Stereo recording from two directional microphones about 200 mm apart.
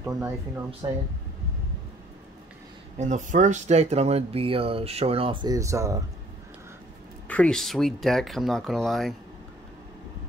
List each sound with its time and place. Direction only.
0.0 s speech: 15° right (ahead or behind)
3.0 s speech: 35° right (ahead or behind); by 5.9 s 15° right (ahead or behind)
7.2 s speech: 5° left (ahead or behind)